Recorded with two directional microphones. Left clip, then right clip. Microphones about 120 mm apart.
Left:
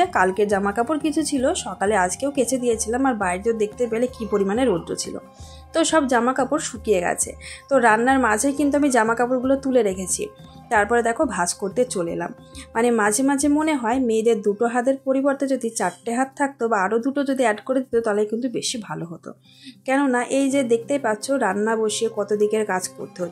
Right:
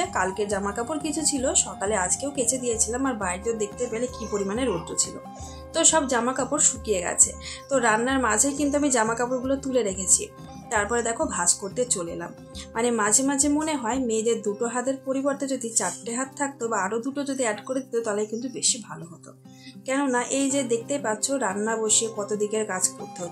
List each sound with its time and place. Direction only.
0.0 s speech: 50° left (ahead or behind)
19.9 s speech: 40° left (ahead or behind)